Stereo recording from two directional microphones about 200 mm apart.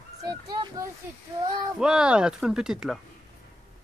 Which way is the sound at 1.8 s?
5° right (ahead or behind).